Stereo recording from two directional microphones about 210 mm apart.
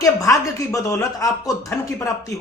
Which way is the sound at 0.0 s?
15° left (ahead or behind).